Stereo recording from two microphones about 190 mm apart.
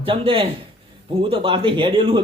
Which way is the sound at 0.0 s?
30° right (ahead or behind).